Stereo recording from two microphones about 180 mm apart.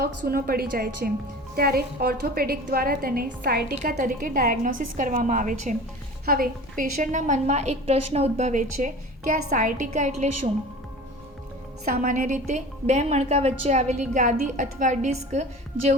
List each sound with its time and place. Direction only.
0.0 s a woman's voice: 55° right (ahead or behind)
11.9 s a woman's voice: 50° right (ahead or behind)